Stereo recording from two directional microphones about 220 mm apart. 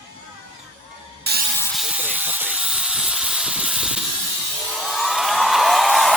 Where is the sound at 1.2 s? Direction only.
45° right (ahead or behind).